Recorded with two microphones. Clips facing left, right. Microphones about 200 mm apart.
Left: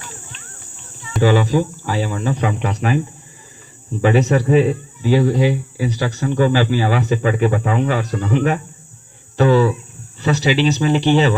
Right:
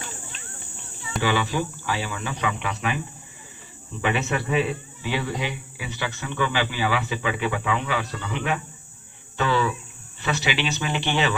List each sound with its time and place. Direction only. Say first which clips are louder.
1.2 s speech: left 9 dB; 40° left (ahead or behind)
4.0 s speech: left 10 dB; 40° left (ahead or behind)